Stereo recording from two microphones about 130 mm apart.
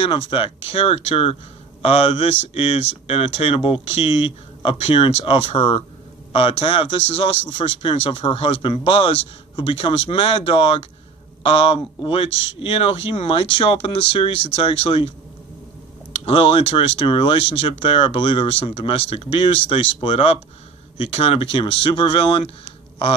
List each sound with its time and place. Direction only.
0.3 s speech: 40° left (ahead or behind)